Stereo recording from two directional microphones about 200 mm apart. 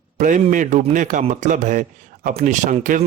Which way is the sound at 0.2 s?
40° right (ahead or behind).